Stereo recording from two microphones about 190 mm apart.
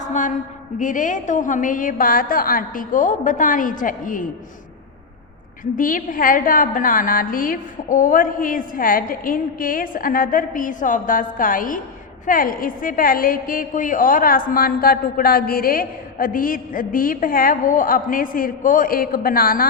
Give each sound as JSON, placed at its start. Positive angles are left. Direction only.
{"t": 0.1, "sound": "a woman's voice", "side_deg": 40}
{"t": 5.7, "sound": "a woman's voice", "side_deg": 45}